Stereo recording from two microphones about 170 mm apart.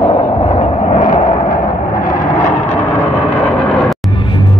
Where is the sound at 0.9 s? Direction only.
55° left (ahead or behind).